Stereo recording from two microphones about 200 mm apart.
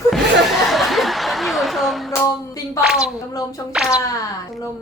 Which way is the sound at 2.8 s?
Centre (ahead or behind).